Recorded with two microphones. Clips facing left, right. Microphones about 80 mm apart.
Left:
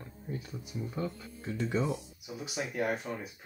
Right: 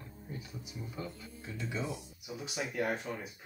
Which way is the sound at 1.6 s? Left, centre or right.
Left.